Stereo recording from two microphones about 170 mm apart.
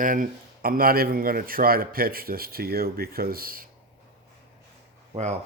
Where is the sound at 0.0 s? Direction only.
50° right (ahead or behind).